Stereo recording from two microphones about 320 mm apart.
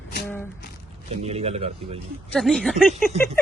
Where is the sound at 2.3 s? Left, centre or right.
Centre.